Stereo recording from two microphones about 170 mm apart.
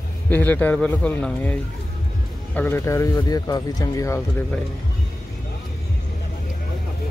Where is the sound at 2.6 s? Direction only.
15° left (ahead or behind).